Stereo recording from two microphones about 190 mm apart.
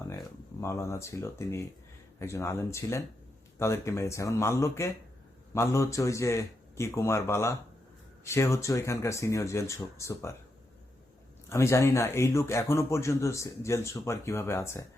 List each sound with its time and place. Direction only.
0.1 s speech: 15° left (ahead or behind)
11.4 s speech: 15° left (ahead or behind)